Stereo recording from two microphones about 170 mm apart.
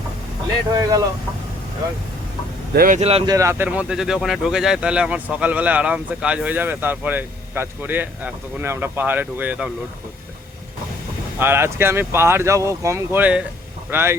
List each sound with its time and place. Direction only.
0.7 s speech: 20° right (ahead or behind)
2.7 s speech: 55° right (ahead or behind)
3.0 s speech: 35° right (ahead or behind)
3.2 s speech: 20° right (ahead or behind)
11.3 s speech: 15° right (ahead or behind)